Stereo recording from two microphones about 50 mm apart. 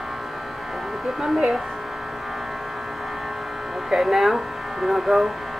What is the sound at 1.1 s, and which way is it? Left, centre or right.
Speech, centre.